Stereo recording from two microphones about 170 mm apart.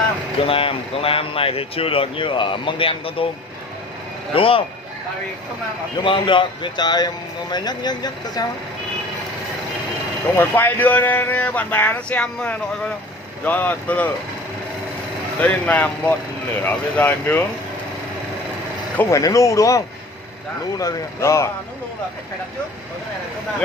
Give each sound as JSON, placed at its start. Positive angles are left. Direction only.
{"t": 0.4, "sound": "speech", "side_deg": 35}
{"t": 4.3, "sound": "speech", "side_deg": 30}
{"t": 6.0, "sound": "speech", "side_deg": 30}
{"t": 10.3, "sound": "speech", "side_deg": 10}
{"t": 15.3, "sound": "speech", "side_deg": 10}
{"t": 18.9, "sound": "speech", "side_deg": 20}